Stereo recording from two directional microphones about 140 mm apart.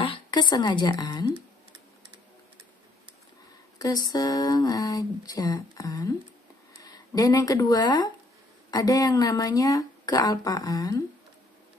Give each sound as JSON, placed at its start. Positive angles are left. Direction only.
{"t": 0.0, "sound": "a woman's voice", "side_deg": 35}
{"t": 3.7, "sound": "speech", "side_deg": 25}